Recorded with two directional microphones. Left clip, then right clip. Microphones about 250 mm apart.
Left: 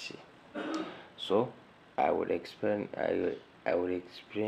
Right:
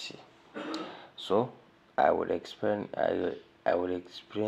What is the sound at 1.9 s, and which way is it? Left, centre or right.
Speech, right.